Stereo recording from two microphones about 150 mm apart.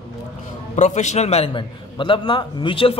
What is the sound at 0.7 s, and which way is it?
A man's voice, 50° left (ahead or behind).